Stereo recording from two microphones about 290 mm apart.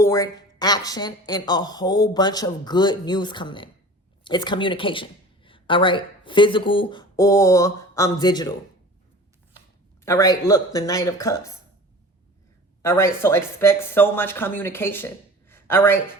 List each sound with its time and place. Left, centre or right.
0.0 s a woman's voice: centre
10.1 s a woman's voice: centre
12.8 s a woman's voice: centre